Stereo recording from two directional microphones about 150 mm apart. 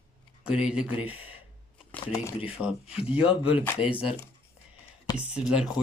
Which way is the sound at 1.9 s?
20° left (ahead or behind).